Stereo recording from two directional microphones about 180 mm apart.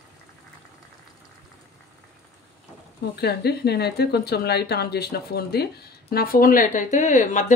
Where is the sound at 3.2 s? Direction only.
65° left (ahead or behind).